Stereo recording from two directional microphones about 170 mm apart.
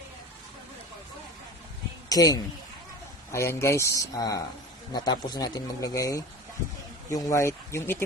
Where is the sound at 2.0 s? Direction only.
20° left (ahead or behind).